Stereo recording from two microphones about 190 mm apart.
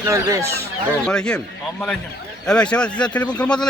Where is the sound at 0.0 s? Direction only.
15° right (ahead or behind).